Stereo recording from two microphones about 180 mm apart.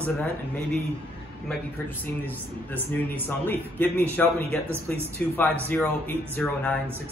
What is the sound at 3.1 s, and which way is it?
Speech, 10° left (ahead or behind).